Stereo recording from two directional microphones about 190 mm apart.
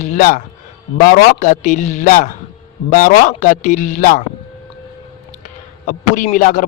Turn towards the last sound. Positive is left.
turn(degrees=45)  # may be behind; listen again after turning